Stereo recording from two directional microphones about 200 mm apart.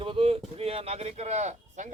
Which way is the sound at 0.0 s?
25° right (ahead or behind).